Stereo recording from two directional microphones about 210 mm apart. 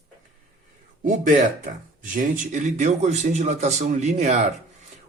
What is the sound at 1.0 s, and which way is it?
Speech, 35° right (ahead or behind).